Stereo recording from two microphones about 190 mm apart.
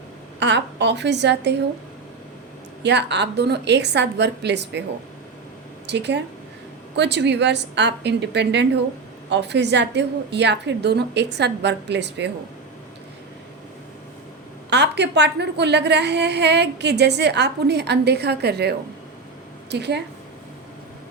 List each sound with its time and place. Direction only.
0.3 s a woman's voice: 65° right (ahead or behind)
2.8 s a woman's voice: 65° right (ahead or behind)
5.8 s a woman's voice: 65° right (ahead or behind)
14.7 s a woman's voice: 65° right (ahead or behind)
19.7 s a woman's voice: 65° right (ahead or behind)